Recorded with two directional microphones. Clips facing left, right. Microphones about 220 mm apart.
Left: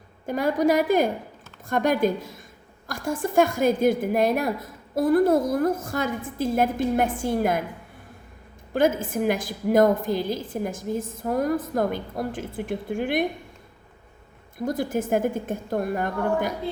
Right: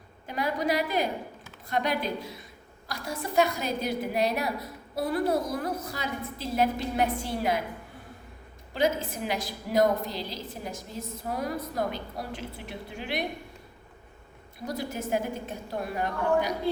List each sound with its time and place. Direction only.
0.3 s a woman's voice: 45° left (ahead or behind)
8.7 s a woman's voice: 50° left (ahead or behind)
14.7 s a woman's voice: 50° left (ahead or behind)